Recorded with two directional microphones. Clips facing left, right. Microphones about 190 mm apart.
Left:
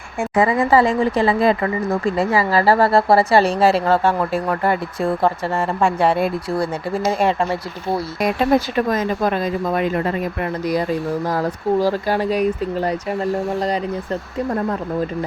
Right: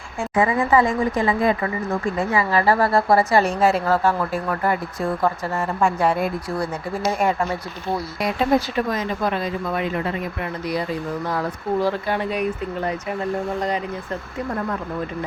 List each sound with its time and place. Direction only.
0.3 s a woman's voice: 35° left (ahead or behind)
8.9 s speech: 45° left (ahead or behind)